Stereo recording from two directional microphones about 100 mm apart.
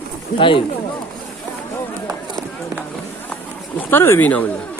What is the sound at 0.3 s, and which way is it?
Speech, 60° left (ahead or behind).